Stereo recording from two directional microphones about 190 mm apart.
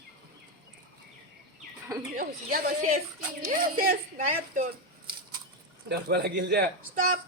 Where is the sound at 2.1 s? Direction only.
50° right (ahead or behind).